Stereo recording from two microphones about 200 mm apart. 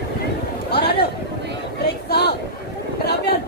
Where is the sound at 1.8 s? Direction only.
55° left (ahead or behind).